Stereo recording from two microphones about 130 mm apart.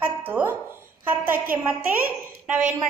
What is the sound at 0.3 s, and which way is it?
Speech, 15° right (ahead or behind).